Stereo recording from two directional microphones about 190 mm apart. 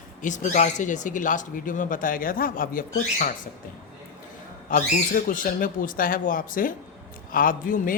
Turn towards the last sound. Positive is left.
turn(degrees=45)  # may be behind; listen again after turning